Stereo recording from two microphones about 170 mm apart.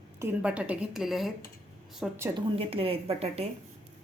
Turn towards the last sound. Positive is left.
turn(degrees=-35)  # may be behind; listen again after turning